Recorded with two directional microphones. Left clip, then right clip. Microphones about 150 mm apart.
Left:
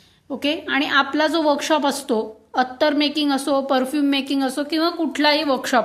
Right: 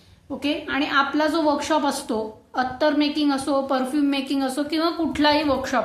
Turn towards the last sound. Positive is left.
turn(degrees=55)  # may be behind; listen again after turning